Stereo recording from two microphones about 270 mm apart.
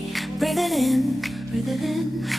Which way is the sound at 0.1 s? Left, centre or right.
Centre.